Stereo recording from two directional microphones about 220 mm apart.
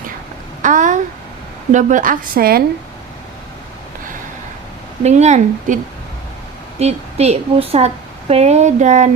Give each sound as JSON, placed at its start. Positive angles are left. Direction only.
{"t": 0.6, "sound": "a sound", "side_deg": -35}
{"t": 1.7, "sound": "a woman's voice", "side_deg": -35}
{"t": 5.0, "sound": "a woman's voice", "side_deg": -30}